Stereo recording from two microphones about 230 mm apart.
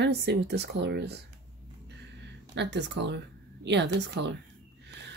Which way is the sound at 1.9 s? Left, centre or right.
Right.